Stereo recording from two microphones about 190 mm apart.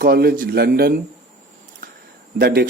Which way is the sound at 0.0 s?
55° right (ahead or behind).